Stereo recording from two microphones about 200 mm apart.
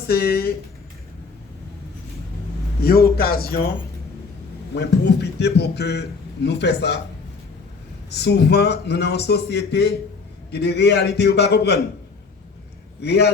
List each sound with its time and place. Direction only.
0.1 s speech: 50° left (ahead or behind)
2.8 s speech: 50° left (ahead or behind)
4.7 s a man's voice: 55° left (ahead or behind)
8.1 s a man's voice: 55° left (ahead or behind)
13.0 s a man's voice: 55° left (ahead or behind)